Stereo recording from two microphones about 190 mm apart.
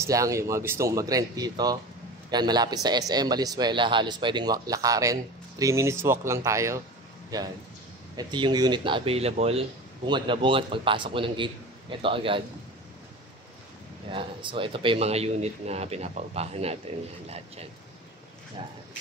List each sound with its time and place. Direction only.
0.0 s speech: 15° right (ahead or behind)
8.2 s speech: 25° right (ahead or behind)
14.1 s a man's voice: 25° right (ahead or behind)